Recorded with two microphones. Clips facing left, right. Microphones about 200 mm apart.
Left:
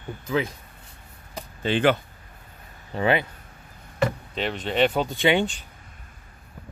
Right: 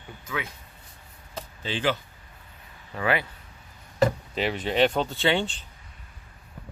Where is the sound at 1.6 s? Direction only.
60° left (ahead or behind).